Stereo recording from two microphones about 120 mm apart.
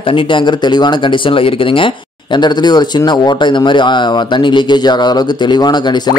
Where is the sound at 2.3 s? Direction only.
35° left (ahead or behind).